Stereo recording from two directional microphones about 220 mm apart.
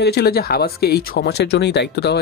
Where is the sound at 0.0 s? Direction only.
45° left (ahead or behind).